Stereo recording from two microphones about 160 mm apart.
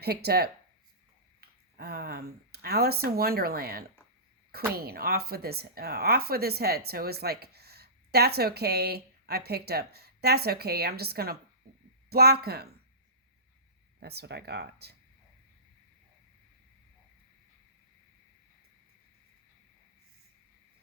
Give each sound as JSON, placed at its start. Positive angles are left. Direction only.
{"t": 0.0, "sound": "speech", "side_deg": -85}
{"t": 14.0, "sound": "speech", "side_deg": -90}